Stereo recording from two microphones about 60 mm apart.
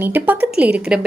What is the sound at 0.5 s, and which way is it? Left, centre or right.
Speech, centre.